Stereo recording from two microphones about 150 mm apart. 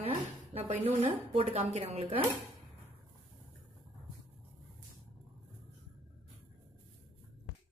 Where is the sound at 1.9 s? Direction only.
40° right (ahead or behind).